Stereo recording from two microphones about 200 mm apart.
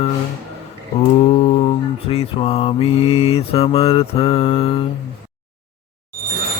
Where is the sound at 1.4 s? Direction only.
30° left (ahead or behind).